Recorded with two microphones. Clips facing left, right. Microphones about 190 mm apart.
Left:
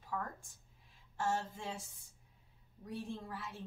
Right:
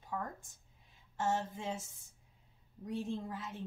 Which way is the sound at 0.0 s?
20° right (ahead or behind).